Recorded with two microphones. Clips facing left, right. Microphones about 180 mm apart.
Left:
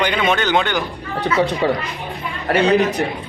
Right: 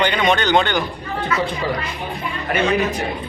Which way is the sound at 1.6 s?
65° left (ahead or behind).